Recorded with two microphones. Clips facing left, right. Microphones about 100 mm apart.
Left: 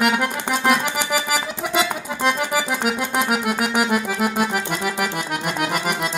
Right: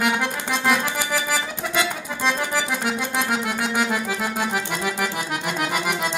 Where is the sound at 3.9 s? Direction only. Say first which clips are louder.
Left 4 dB; 10° left (ahead or behind).